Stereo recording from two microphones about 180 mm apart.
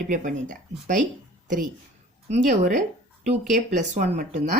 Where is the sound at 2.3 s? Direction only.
45° right (ahead or behind).